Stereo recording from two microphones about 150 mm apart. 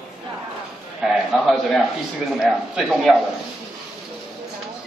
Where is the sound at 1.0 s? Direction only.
Centre (ahead or behind).